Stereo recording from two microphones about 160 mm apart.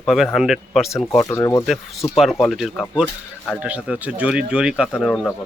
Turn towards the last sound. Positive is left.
turn(degrees=5)  # may be behind; listen again after turning